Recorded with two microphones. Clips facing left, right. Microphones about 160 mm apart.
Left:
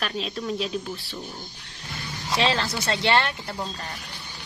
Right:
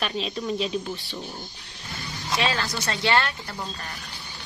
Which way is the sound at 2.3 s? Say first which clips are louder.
Left 2 dB; 25° left (ahead or behind).